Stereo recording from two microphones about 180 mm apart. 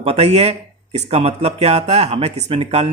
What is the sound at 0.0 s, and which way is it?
Speech, 35° right (ahead or behind).